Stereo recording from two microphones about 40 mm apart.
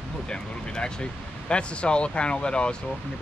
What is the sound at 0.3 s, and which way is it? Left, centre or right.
Speech, centre.